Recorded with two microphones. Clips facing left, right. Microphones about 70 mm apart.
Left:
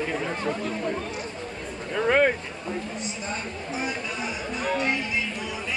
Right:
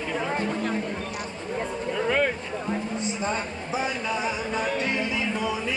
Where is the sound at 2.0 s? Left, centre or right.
Left.